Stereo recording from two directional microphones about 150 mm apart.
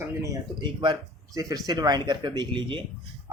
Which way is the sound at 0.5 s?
30° right (ahead or behind).